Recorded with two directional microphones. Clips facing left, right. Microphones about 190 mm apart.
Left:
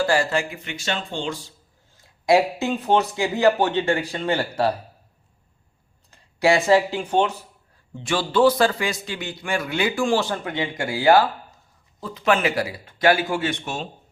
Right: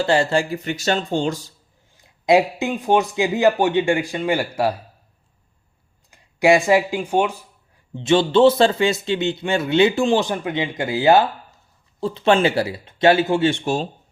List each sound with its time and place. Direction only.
0.0 s speech: 25° right (ahead or behind); by 1.5 s 40° right (ahead or behind)
2.0 s speech: 20° right (ahead or behind)
6.1 s speech: 15° right (ahead or behind)
7.9 s a man's voice: 25° right (ahead or behind)